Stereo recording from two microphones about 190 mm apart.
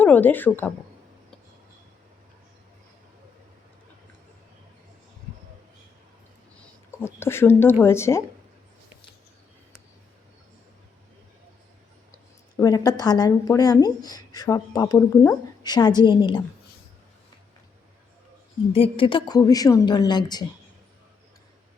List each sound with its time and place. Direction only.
0.0 s speech: 10° left (ahead or behind)
6.6 s speech: 10° left (ahead or behind)
12.5 s speech: 20° left (ahead or behind)
18.7 s speech: 30° left (ahead or behind)